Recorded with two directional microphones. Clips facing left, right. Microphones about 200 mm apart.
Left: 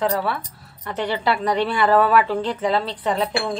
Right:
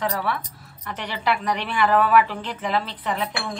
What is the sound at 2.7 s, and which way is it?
Speech, 30° left (ahead or behind).